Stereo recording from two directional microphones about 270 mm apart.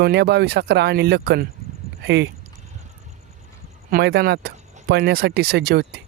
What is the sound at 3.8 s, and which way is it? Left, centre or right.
Speech, right.